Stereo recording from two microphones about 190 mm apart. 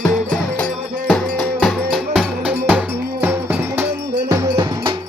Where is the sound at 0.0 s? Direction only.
5° left (ahead or behind); by 3.8 s 10° right (ahead or behind).